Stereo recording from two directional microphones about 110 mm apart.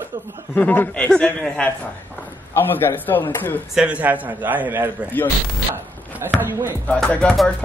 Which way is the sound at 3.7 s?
10° right (ahead or behind).